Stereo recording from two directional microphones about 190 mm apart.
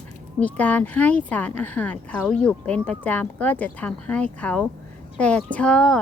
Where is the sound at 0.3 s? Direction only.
10° left (ahead or behind).